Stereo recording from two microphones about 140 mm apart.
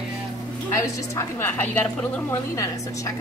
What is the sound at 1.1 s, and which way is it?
A woman's voice, 15° left (ahead or behind).